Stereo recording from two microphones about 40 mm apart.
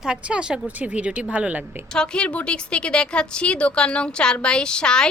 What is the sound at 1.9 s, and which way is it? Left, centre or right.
A woman's voice, left.